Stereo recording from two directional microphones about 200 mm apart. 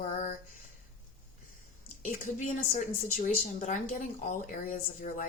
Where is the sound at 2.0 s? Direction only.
40° left (ahead or behind).